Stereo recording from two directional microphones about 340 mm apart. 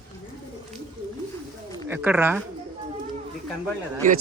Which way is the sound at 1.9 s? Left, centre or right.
Centre.